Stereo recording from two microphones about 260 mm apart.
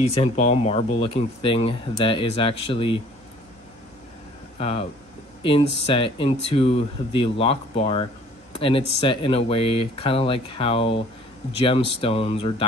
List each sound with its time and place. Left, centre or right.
0.0 s speech: left
4.6 s speech: left